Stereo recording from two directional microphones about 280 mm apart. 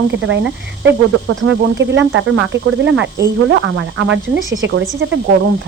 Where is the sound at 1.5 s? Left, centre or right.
Right.